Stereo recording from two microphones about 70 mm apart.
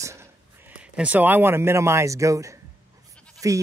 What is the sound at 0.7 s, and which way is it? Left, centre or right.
Speech, centre.